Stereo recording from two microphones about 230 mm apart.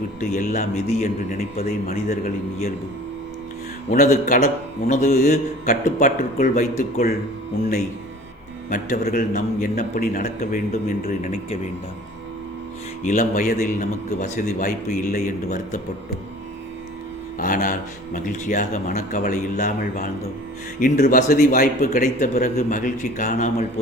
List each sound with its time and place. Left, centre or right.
0.2 s a man's voice: left
2.2 s speech: left
3.9 s a man's voice: left
8.7 s speech: left
13.0 s speech: left
17.3 s speech: left